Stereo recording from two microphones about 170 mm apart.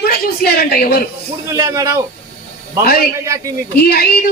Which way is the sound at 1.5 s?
20° right (ahead or behind).